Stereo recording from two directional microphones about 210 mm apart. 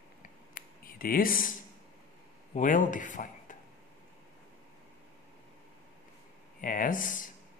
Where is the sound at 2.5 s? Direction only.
35° left (ahead or behind).